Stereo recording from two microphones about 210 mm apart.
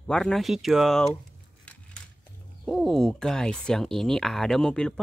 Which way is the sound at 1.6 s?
5° left (ahead or behind).